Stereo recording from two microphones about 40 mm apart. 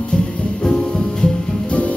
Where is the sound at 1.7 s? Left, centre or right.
Left.